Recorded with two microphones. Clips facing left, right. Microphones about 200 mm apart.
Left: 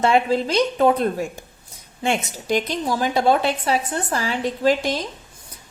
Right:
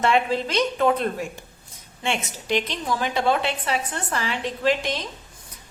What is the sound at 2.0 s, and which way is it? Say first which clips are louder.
A woman's voice: left 4 dB; 40° left (ahead or behind).